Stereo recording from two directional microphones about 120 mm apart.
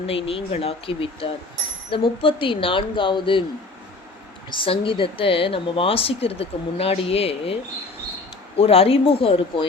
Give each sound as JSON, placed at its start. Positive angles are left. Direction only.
{"t": 0.0, "sound": "a woman's voice", "side_deg": 50}
{"t": 4.5, "sound": "a woman's voice", "side_deg": 45}